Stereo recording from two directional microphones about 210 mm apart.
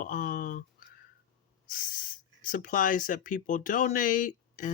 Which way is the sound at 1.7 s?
40° left (ahead or behind).